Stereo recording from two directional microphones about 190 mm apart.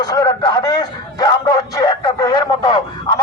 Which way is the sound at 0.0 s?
20° left (ahead or behind).